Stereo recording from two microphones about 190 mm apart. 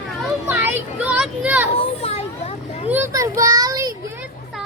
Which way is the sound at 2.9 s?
10° right (ahead or behind).